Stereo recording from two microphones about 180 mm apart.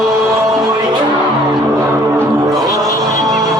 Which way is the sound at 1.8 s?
15° right (ahead or behind).